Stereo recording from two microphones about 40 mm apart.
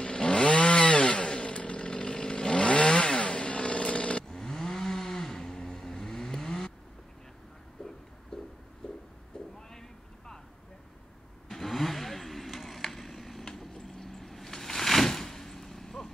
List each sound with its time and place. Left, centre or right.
0.0 s chainsaw: left
4.3 s vehicle: centre
7.8 s a sound: centre
9.6 s vehicle: centre
11.4 s vehicle: centre